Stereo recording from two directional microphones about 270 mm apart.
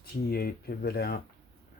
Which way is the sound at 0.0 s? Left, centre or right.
Left.